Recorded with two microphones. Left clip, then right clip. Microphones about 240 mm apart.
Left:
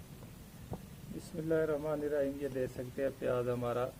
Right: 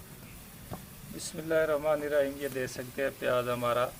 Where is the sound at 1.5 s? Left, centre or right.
Left.